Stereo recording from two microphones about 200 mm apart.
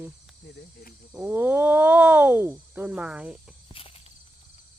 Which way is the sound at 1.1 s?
10° right (ahead or behind).